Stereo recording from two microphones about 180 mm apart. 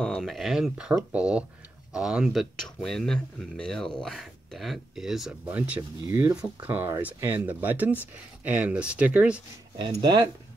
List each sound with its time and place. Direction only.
0.0 s speech: centre (ahead or behind)
9.8 s speech: 25° right (ahead or behind)